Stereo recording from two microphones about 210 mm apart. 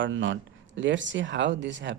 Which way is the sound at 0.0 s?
60° right (ahead or behind).